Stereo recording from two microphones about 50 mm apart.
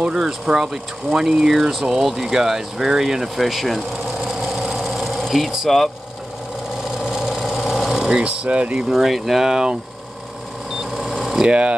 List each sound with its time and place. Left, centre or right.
0.1 s speech: centre
4.4 s sewing machine: centre
7.0 s vehicle: centre
8.0 s speech: centre
8.9 s speech: centre
10.8 s camera: centre